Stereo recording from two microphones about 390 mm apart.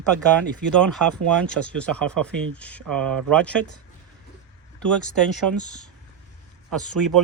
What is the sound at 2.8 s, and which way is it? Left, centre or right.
Speech, right.